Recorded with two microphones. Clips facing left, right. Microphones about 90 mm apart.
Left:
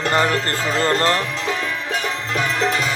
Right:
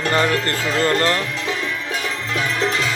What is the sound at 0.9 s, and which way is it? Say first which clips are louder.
Speech: left 1 dB; 30° left (ahead or behind).